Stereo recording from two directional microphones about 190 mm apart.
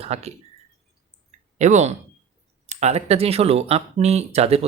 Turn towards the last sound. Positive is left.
turn(degrees=-35)  # may be behind; listen again after turning